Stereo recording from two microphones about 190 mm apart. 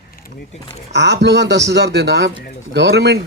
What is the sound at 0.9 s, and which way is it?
A man's voice, 65° right (ahead or behind).